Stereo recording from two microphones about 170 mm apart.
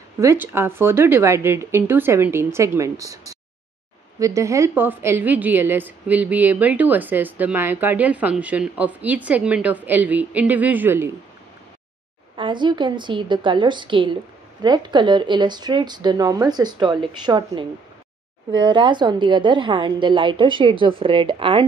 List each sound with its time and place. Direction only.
0.2 s a woman's voice: 15° right (ahead or behind)
12.4 s speech: 30° right (ahead or behind)